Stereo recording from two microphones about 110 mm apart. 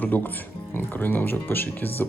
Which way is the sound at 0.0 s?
15° left (ahead or behind).